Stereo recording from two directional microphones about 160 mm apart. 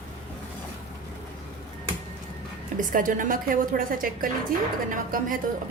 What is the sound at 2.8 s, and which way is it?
A woman's voice, 55° right (ahead or behind).